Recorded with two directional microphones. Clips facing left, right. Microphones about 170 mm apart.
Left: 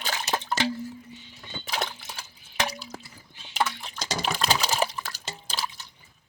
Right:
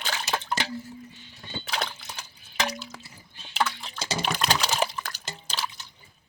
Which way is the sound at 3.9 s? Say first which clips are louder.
Right 1 dB; 10° right (ahead or behind).